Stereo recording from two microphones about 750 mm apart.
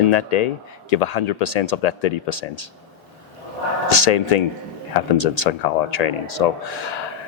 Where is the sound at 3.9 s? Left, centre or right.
Left.